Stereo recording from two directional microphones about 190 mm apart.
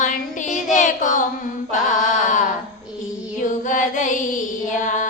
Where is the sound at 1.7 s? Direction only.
40° left (ahead or behind).